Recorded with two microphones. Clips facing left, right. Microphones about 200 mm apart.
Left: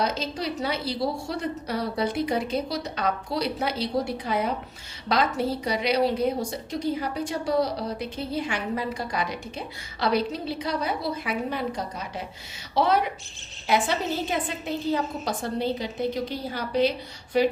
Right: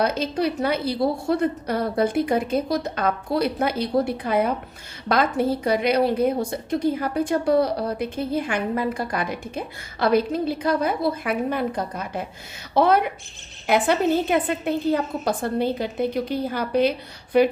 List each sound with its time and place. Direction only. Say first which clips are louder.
0.0 s a woman's voice: right 6 dB; 55° right (ahead or behind)